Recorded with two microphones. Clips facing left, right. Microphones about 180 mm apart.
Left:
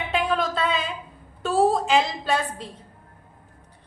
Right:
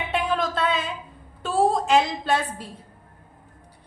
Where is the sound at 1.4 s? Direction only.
Centre (ahead or behind).